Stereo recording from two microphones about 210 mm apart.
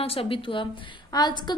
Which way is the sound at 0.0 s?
25° left (ahead or behind).